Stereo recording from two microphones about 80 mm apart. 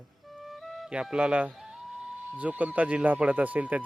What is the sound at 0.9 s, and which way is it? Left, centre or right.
Speech, centre.